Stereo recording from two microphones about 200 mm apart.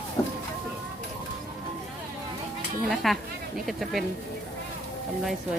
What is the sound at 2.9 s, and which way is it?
A woman's voice, centre (ahead or behind).